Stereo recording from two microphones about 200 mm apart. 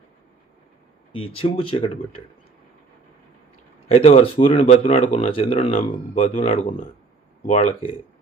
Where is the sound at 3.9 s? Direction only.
30° left (ahead or behind).